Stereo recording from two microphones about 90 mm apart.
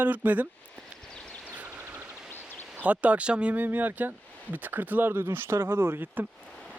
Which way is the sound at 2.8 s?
15° right (ahead or behind).